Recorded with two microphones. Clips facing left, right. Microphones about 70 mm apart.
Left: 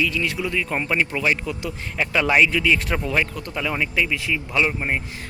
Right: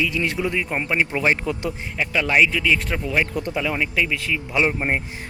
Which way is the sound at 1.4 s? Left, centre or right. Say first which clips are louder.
Right 3 dB; right.